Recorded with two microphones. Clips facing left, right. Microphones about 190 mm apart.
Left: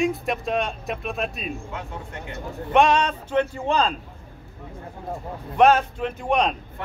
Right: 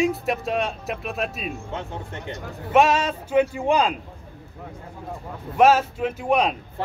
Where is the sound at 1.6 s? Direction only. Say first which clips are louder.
Right 2 dB; 25° right (ahead or behind).